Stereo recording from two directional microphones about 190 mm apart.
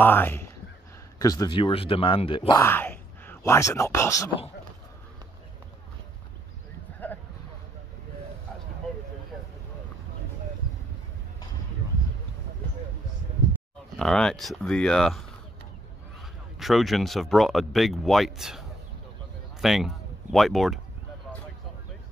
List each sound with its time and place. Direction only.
0.0 s a man's voice: 10° left (ahead or behind); by 2.6 s 25° left (ahead or behind)
2.6 s speech: 10° left (ahead or behind)
7.0 s a sound: 10° left (ahead or behind)
13.9 s speech: 5° left (ahead or behind)